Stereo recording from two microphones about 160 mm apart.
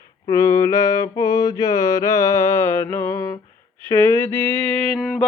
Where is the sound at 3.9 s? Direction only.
15° left (ahead or behind); by 5.2 s centre (ahead or behind).